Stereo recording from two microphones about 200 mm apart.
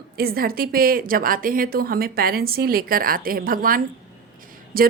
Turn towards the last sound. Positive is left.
turn(degrees=-45)  # may be behind; listen again after turning